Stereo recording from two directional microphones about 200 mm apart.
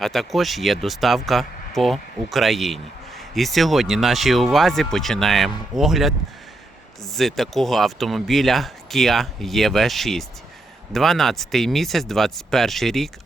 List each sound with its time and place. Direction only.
0.0 s speech: centre (ahead or behind)